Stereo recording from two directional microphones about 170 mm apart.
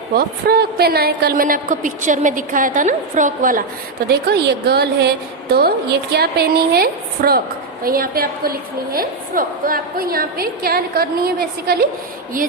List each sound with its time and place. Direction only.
0.2 s a woman's voice: 65° right (ahead or behind)
4.1 s a woman's voice: 70° right (ahead or behind)